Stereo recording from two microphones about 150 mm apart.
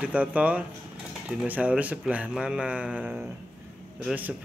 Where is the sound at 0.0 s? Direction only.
10° right (ahead or behind).